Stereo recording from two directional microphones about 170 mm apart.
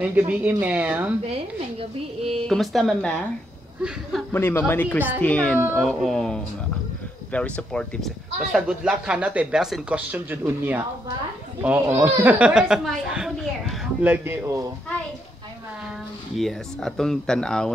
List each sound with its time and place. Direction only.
0.0 s a woman's voice: 10° right (ahead or behind)
1.2 s speech: 35° right (ahead or behind)
2.4 s speech: centre (ahead or behind)
4.3 s a woman's voice: 15° left (ahead or behind); by 14.7 s 15° right (ahead or behind)
16.3 s speech: centre (ahead or behind)